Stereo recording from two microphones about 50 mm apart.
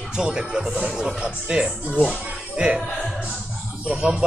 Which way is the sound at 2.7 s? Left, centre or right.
Centre.